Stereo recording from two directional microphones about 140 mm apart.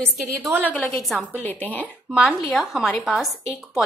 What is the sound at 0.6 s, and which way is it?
A woman's voice, 10° left (ahead or behind).